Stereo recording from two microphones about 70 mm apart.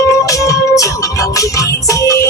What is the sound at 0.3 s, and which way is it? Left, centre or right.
Music, left.